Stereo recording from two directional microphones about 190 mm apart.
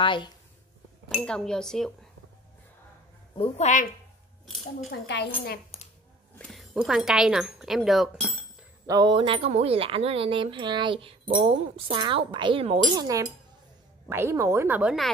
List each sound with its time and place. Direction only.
0.0 s speech: 25° left (ahead or behind)
1.0 s speech: 5° left (ahead or behind)
3.3 s a woman's voice: 35° left (ahead or behind)
5.0 s a woman's voice: 65° left (ahead or behind)
6.3 s speech: centre (ahead or behind)
8.8 s speech: 20° right (ahead or behind); by 15.0 s 5° right (ahead or behind)